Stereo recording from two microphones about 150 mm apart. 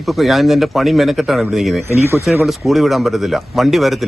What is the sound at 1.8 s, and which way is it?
Speech, 15° right (ahead or behind).